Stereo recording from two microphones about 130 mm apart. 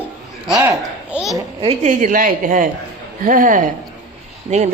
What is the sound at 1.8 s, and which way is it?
A woman's voice, 75° right (ahead or behind).